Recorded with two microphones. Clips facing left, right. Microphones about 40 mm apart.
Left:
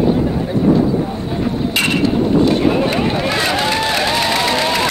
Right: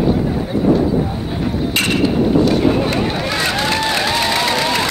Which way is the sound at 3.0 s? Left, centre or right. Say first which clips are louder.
Left 2 dB; centre.